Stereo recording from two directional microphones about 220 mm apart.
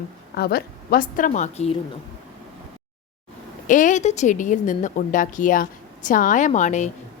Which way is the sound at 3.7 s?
35° left (ahead or behind).